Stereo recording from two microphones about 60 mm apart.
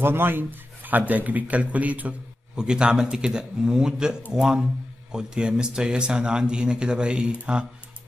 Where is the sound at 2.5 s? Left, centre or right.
Centre.